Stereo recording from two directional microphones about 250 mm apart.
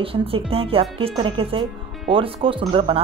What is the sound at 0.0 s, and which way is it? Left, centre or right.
Speech, right.